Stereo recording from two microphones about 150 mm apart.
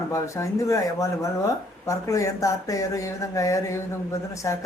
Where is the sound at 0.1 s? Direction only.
20° left (ahead or behind).